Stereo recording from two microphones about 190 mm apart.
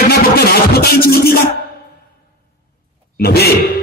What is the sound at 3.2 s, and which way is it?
Speech, 55° left (ahead or behind).